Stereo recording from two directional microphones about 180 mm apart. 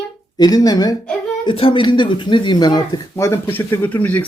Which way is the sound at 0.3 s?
20° left (ahead or behind).